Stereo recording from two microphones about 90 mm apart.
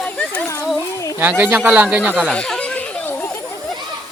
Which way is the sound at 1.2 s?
20° right (ahead or behind).